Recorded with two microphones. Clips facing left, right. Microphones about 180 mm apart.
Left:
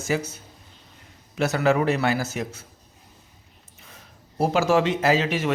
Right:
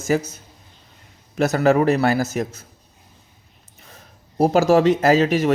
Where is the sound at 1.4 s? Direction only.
40° right (ahead or behind).